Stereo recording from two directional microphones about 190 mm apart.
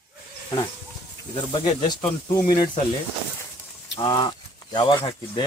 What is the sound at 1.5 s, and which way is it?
Speech, 25° left (ahead or behind).